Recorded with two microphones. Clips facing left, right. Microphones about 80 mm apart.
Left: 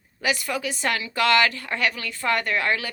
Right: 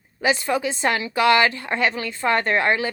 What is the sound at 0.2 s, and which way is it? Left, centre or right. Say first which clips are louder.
A woman's voice: right 5 dB; right.